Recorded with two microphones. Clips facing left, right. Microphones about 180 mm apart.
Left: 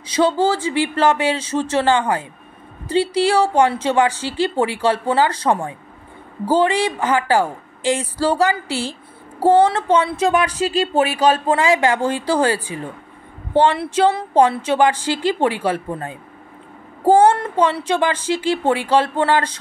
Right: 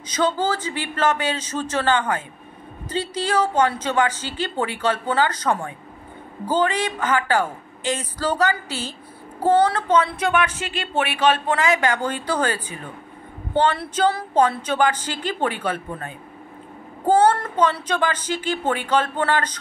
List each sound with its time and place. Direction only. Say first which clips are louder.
0.1 s speech: left 5 dB; 30° left (ahead or behind)